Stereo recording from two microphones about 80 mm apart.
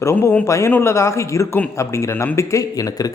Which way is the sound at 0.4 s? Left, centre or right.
Left.